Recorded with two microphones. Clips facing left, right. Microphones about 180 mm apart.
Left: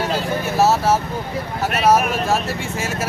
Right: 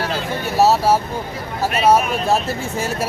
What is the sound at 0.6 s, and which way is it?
Speech, 35° right (ahead or behind).